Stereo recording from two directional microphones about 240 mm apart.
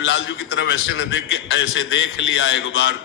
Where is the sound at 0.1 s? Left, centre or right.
Left.